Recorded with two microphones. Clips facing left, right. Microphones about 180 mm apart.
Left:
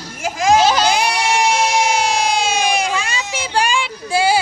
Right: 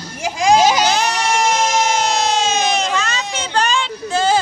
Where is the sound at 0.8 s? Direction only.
10° left (ahead or behind).